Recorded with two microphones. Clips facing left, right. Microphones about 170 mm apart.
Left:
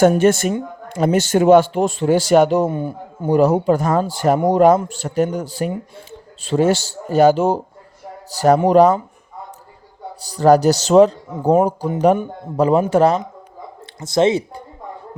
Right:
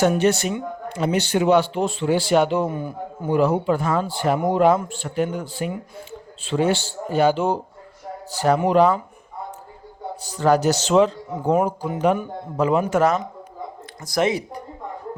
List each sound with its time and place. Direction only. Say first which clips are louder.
0.0 s speech: left 5 dB; 50° left (ahead or behind)
2.6 s a man's voice: left 4 dB; 30° left (ahead or behind)
3.3 s a man's voice: left 5 dB; 40° left (ahead or behind)
10.2 s a man's voice: left 6 dB; 35° left (ahead or behind)